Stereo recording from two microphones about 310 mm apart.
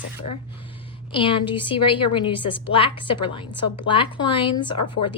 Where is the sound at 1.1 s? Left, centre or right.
Centre.